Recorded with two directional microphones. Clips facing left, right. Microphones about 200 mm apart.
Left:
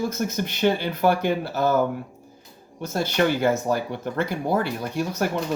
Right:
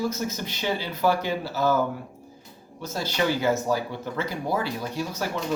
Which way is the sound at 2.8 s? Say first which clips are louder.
Left 4 dB; 55° left (ahead or behind).